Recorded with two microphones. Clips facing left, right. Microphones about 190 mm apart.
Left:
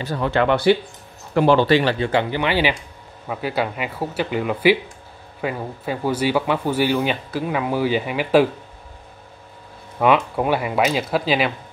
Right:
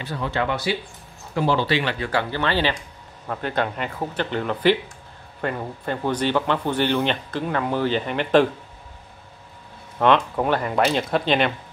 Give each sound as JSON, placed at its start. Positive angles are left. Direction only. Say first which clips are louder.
{"t": 0.2, "sound": "speech", "louder": "left 7 dB", "side_deg": 65}
{"t": 1.7, "sound": "speech", "louder": "left 6 dB", "side_deg": 40}
{"t": 2.0, "sound": "speech", "louder": "left 4 dB", "side_deg": 20}
{"t": 9.9, "sound": "speech", "louder": "left 1 dB", "side_deg": 5}